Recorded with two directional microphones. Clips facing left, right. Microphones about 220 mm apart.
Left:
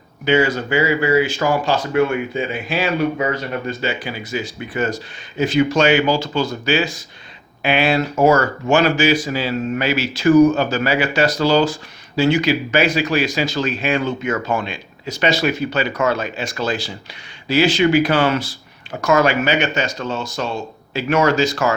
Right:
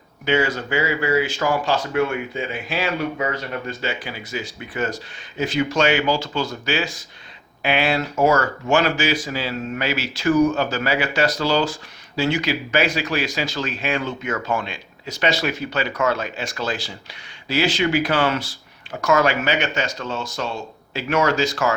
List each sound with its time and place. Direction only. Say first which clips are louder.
0.3 s speech: left 4 dB; 10° left (ahead or behind)
5.4 s speech: left 4 dB; 15° left (ahead or behind)